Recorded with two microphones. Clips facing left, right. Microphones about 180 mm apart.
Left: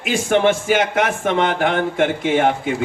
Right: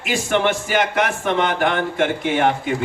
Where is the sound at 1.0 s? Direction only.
45° left (ahead or behind).